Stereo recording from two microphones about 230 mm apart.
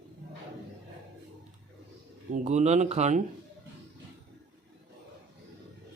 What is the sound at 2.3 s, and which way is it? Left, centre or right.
Speech, right.